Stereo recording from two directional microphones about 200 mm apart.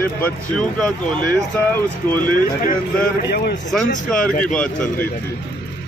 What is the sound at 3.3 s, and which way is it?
Speech, 50° left (ahead or behind).